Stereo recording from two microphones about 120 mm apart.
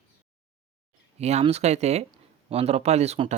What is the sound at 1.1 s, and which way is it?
Speech, 65° right (ahead or behind).